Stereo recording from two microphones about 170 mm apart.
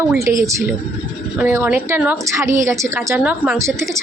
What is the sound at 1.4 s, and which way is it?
A woman's voice, 10° right (ahead or behind).